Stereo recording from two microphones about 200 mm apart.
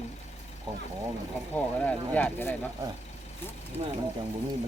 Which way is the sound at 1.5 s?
5° left (ahead or behind).